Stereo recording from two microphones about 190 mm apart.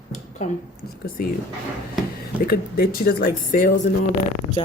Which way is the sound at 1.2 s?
50° left (ahead or behind).